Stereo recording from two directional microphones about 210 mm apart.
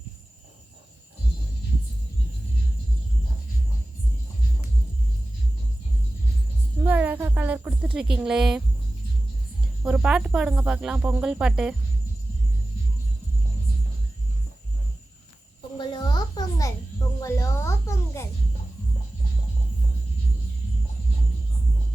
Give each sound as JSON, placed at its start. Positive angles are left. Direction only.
{"t": 6.8, "sound": "a sound", "side_deg": -5}
{"t": 9.8, "sound": "speech", "side_deg": -5}
{"t": 15.8, "sound": "music", "side_deg": 20}